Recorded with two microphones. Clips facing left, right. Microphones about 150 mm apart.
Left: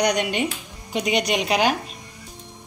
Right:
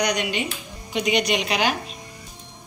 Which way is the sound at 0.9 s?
40° left (ahead or behind).